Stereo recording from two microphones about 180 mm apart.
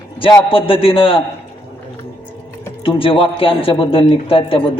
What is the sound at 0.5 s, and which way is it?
Speech, 30° left (ahead or behind).